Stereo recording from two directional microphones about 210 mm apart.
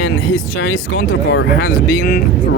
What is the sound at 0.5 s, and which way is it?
Speech, 75° left (ahead or behind).